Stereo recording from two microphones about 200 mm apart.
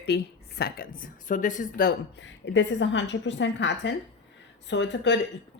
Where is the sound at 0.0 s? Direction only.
55° left (ahead or behind).